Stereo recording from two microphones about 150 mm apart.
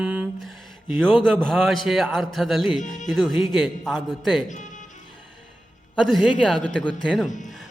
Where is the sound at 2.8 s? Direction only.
55° left (ahead or behind).